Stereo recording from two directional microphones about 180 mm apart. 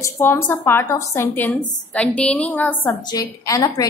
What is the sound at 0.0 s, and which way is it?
A woman's voice, 10° left (ahead or behind).